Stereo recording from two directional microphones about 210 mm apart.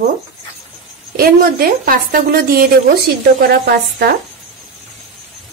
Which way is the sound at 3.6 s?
50° right (ahead or behind).